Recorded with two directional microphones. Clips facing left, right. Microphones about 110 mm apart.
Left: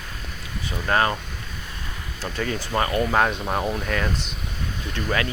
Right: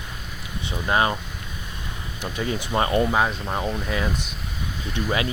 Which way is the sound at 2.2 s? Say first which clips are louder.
Even; 20° right (ahead or behind).